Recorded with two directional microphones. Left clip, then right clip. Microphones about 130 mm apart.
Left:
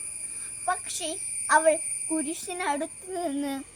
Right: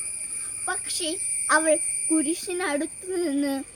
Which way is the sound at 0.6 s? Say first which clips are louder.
Even; 25° left (ahead or behind).